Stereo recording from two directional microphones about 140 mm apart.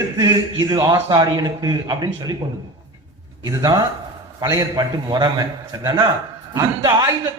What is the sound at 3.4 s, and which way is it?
A man's voice, 25° right (ahead or behind).